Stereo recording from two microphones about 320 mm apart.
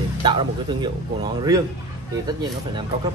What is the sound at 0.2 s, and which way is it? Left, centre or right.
Speech, centre.